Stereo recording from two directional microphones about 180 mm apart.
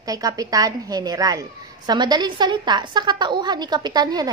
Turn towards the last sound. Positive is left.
turn(degrees=-20)  # may be behind; listen again after turning